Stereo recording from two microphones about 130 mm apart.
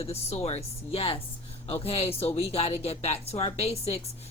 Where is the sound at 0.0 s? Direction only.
50° left (ahead or behind).